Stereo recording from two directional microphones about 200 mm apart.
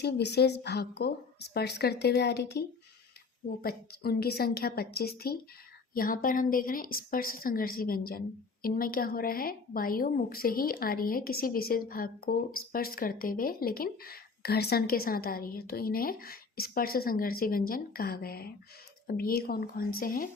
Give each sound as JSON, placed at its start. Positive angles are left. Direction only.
{"t": 0.0, "sound": "a woman's voice", "side_deg": 55}